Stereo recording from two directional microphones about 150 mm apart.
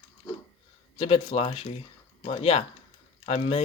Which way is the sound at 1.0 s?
40° left (ahead or behind).